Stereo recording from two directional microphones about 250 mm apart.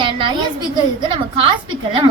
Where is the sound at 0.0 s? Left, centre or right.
Centre.